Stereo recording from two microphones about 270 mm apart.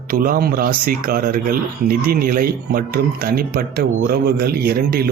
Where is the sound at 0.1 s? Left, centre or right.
Right.